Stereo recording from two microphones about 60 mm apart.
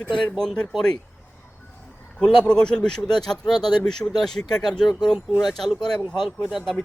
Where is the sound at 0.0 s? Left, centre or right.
Centre.